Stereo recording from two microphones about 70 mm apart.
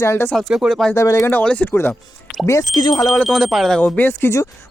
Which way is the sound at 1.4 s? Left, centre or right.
Left.